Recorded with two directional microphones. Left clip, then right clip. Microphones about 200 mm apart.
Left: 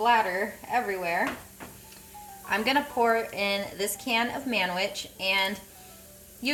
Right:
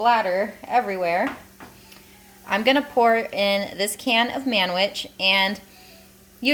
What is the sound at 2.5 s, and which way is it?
A woman's voice, 50° right (ahead or behind).